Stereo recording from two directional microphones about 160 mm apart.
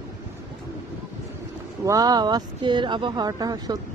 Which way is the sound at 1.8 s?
25° right (ahead or behind).